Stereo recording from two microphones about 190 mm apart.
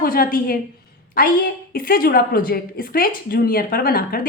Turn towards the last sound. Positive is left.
turn(degrees=50)  # may be behind; listen again after turning